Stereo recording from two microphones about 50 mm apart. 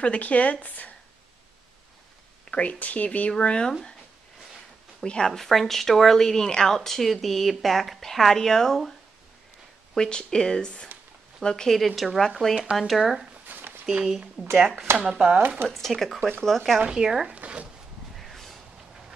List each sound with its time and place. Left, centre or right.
0.0 s speech: left
2.5 s speech: left
5.0 s a woman's voice: centre
9.9 s speech: centre
11.7 s a woman's voice: centre
13.5 s a sound: right
14.5 s a woman's voice: centre
15.0 s speech: right
15.7 s a woman's voice: centre
16.2 s speech: centre
16.4 s a woman's voice: centre
16.8 s speech: centre
17.3 s speech: right
18.1 s a sound: centre